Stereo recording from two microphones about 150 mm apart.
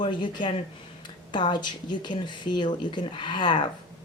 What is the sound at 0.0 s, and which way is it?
Speech, 30° left (ahead or behind).